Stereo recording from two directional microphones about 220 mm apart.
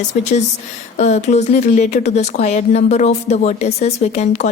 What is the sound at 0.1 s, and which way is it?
A woman's voice, 30° left (ahead or behind).